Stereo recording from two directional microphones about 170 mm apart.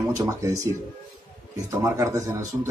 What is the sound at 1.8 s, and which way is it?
Speech, 20° right (ahead or behind).